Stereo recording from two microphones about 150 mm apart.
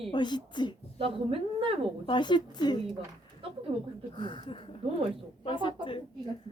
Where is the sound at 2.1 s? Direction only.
30° left (ahead or behind).